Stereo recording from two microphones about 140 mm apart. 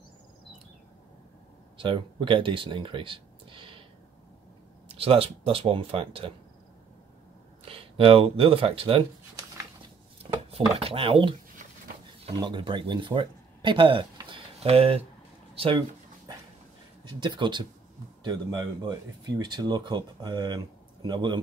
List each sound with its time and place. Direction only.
1.8 s speech: 35° right (ahead or behind)
4.8 s speech: 45° right (ahead or behind)
7.6 s speech: 40° right (ahead or behind)
10.5 s speech: 45° right (ahead or behind)
12.4 s speech: 35° right (ahead or behind)
17.1 s speech: 30° right (ahead or behind)